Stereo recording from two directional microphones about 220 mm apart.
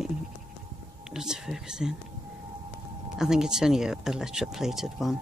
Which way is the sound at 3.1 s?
5° right (ahead or behind).